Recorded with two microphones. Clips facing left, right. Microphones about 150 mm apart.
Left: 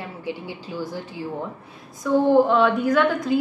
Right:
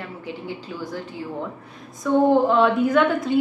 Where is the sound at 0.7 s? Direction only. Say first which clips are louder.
Left 5 dB; 15° left (ahead or behind).